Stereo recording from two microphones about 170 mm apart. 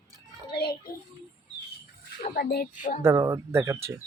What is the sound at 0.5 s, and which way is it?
Child singing, 65° left (ahead or behind).